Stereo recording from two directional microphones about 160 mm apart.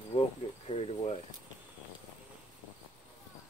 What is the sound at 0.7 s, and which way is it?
Speech, 40° left (ahead or behind).